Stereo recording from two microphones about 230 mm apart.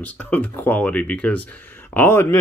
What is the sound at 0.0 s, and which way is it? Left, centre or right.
Speech, centre.